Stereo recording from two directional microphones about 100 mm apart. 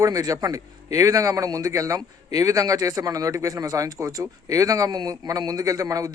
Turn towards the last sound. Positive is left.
turn(degrees=-35)  # may be behind; listen again after turning